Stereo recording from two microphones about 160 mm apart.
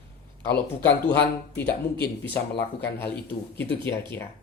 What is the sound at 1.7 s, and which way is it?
Speech, 85° left.